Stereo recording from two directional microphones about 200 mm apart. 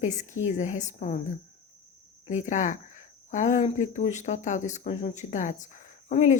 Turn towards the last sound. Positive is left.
turn(degrees=40)  # may be behind; listen again after turning